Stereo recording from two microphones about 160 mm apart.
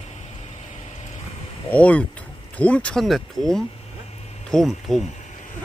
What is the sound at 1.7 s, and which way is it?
Speech, 10° left (ahead or behind).